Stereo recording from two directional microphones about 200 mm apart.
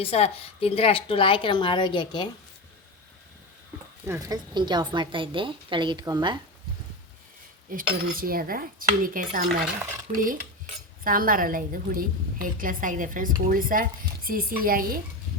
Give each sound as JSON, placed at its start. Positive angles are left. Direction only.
{"t": 0.0, "sound": "a woman's voice", "side_deg": 30}
{"t": 4.0, "sound": "a woman's voice", "side_deg": -15}
{"t": 7.7, "sound": "a woman's voice", "side_deg": -45}
{"t": 11.0, "sound": "a woman's voice", "side_deg": -45}